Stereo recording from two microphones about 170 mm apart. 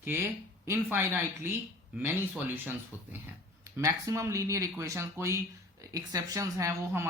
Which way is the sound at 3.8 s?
20° right (ahead or behind).